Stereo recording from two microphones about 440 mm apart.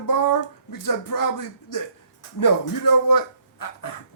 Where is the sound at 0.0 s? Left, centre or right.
Left.